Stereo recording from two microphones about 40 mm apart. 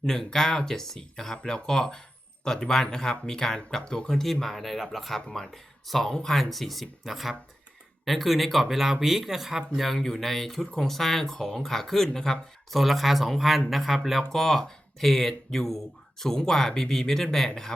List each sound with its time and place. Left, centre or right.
0.0 s speech: centre
4.2 s speech: centre